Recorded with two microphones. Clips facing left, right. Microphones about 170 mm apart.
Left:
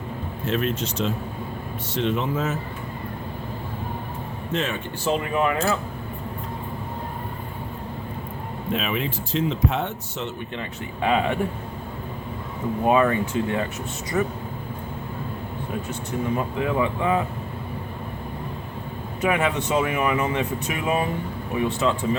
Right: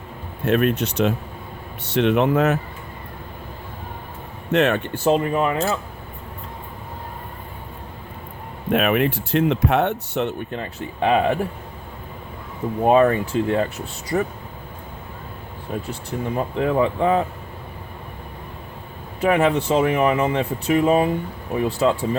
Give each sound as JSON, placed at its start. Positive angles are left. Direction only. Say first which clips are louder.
{"t": 0.4, "sound": "speech", "louder": "right 6 dB", "side_deg": -60}
{"t": 4.5, "sound": "speech", "louder": "right 9 dB", "side_deg": -65}
{"t": 5.0, "sound": "speech", "louder": "right 4 dB", "side_deg": -40}
{"t": 8.7, "sound": "speech", "louder": "right 8 dB", "side_deg": -60}
{"t": 10.5, "sound": "speech", "louder": "right 3 dB", "side_deg": -35}
{"t": 12.8, "sound": "speech", "louder": "right 4 dB", "side_deg": -35}
{"t": 16.1, "sound": "speech", "louder": "right 1 dB", "side_deg": -35}
{"t": 19.2, "sound": "speech", "louder": "right 5 dB", "side_deg": -30}